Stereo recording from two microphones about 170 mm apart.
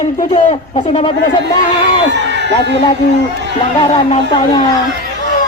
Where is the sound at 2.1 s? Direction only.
90° right.